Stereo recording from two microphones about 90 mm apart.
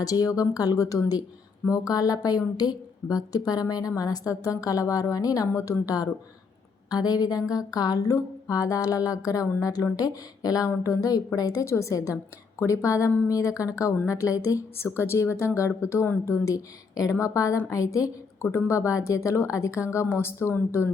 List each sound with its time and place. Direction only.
0.0 s a woman's voice: 40° left (ahead or behind); by 20.9 s 25° left (ahead or behind)